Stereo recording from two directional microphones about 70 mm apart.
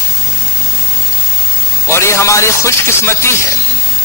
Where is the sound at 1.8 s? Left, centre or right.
Left.